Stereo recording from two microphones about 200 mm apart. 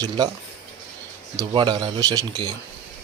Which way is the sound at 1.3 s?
20° right (ahead or behind).